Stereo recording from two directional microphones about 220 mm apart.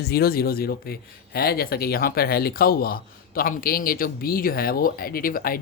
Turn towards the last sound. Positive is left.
turn(degrees=40)  # may be behind; listen again after turning